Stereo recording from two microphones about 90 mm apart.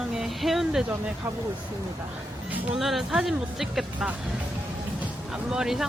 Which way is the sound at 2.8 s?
Centre (ahead or behind).